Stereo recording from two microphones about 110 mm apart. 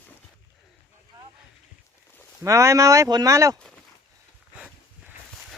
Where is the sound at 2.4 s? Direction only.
25° right (ahead or behind).